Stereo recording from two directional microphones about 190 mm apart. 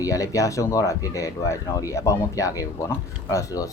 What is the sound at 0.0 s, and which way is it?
Speech, 15° left (ahead or behind).